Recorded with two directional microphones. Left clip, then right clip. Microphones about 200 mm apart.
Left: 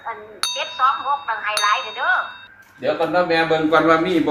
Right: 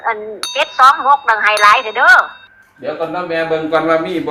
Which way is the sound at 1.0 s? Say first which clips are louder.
Right 11 dB; 40° right (ahead or behind).